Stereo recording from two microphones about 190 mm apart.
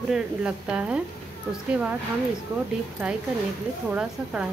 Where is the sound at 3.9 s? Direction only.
5° right (ahead or behind).